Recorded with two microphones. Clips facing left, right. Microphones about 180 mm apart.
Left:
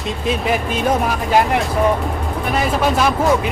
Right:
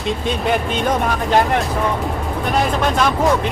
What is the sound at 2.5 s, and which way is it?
Speech, 5° left (ahead or behind).